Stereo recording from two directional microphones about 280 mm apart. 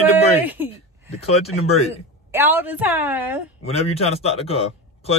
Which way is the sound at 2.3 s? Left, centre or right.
Centre.